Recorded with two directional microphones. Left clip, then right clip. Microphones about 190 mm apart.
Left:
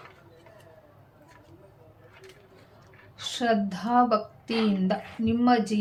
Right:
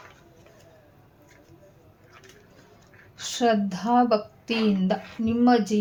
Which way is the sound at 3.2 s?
20° right (ahead or behind).